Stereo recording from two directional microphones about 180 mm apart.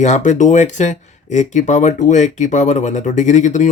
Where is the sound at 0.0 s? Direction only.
40° left (ahead or behind).